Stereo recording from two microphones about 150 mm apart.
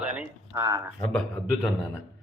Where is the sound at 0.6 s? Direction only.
25° right (ahead or behind).